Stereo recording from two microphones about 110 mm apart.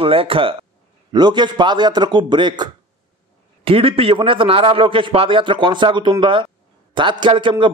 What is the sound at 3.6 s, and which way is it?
A man's voice, 55° right (ahead or behind).